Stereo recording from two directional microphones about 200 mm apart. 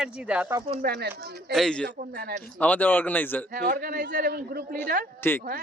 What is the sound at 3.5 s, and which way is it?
Speech, 45° right (ahead or behind).